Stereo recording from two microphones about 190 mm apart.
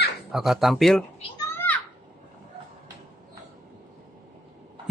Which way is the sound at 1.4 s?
10° left (ahead or behind).